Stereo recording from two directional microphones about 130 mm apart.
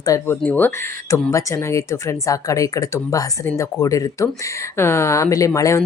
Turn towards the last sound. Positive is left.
turn(degrees=25)  # may be behind; listen again after turning